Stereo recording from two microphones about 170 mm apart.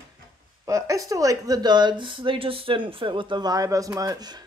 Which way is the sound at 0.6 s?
20° right (ahead or behind).